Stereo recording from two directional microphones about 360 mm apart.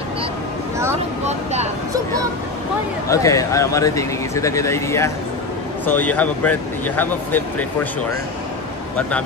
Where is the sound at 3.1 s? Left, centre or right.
Centre.